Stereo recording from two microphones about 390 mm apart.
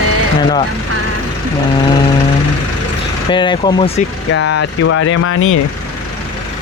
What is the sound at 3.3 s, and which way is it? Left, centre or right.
Speech, centre.